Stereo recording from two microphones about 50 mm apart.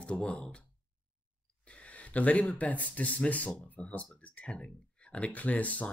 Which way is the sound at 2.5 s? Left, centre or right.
Left.